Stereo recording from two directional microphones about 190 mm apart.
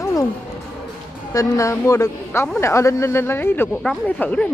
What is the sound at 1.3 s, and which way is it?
Speech, 15° left (ahead or behind).